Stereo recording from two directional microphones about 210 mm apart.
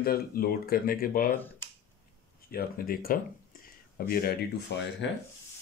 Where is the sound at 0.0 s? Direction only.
45° left (ahead or behind).